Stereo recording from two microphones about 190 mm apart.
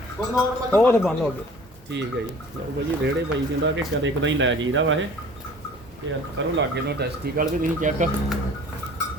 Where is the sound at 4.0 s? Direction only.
80° right.